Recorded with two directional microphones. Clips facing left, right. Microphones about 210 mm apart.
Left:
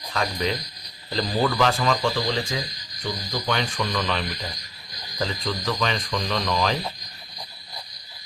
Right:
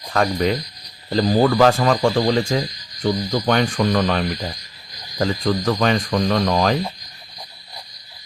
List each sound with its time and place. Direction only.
0.1 s speech: 50° right (ahead or behind)